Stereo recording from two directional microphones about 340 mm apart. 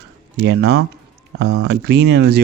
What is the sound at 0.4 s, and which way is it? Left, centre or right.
Speech, right.